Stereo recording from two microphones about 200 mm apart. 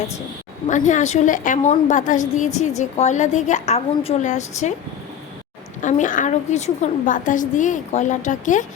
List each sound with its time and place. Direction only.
0.7 s a woman's voice: 35° left (ahead or behind)
5.8 s a woman's voice: 40° left (ahead or behind)